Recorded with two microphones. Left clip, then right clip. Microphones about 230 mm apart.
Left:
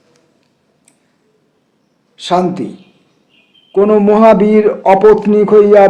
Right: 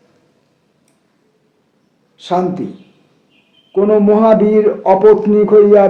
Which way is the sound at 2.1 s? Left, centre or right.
Left.